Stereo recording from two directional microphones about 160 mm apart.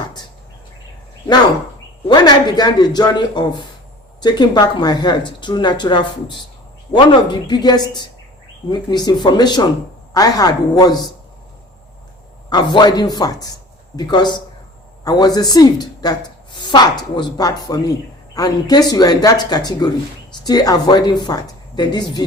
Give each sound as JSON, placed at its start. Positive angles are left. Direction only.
{"t": 2.0, "sound": "speech", "side_deg": 25}
{"t": 12.5, "sound": "a woman's voice", "side_deg": 30}